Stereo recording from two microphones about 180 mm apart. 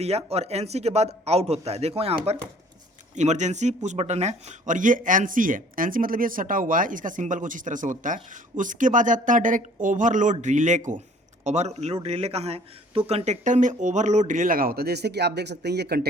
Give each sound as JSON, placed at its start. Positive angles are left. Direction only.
{"t": 0.0, "sound": "a man's voice", "side_deg": -35}